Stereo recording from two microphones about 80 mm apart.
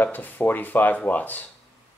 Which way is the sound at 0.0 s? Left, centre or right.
Left.